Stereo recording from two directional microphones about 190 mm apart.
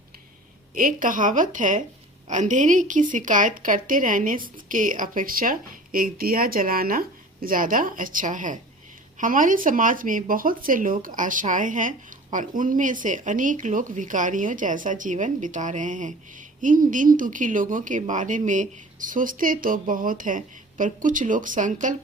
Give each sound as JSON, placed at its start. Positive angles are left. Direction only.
{"t": 0.8, "sound": "speech", "side_deg": -45}